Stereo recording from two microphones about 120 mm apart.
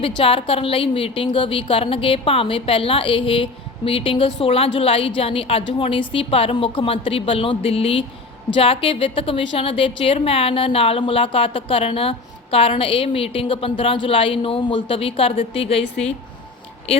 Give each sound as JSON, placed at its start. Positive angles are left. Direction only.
{"t": 0.2, "sound": "a woman's voice", "side_deg": 50}